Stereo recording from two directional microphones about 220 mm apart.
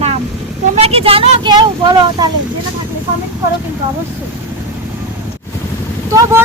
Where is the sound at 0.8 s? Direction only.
25° right (ahead or behind).